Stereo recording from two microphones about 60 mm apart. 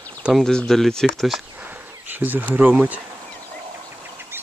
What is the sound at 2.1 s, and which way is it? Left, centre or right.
Speech, right.